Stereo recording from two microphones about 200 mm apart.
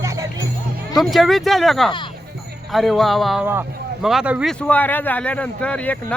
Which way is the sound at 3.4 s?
10° right (ahead or behind).